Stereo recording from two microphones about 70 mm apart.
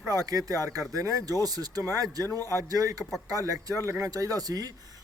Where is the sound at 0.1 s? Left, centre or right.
Right.